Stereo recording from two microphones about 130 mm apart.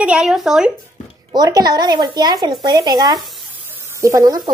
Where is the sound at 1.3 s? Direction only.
30° right (ahead or behind).